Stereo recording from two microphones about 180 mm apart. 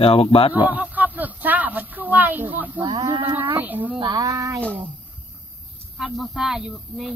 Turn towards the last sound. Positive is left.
turn(degrees=0)  # may be behind; listen again after turning